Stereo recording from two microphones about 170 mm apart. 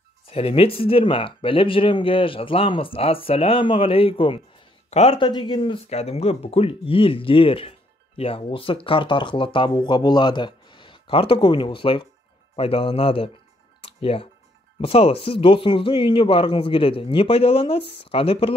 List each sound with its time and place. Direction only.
0.3 s speech: 35° left (ahead or behind)
13.7 s music: 35° left (ahead or behind)
14.8 s speech: 35° left (ahead or behind)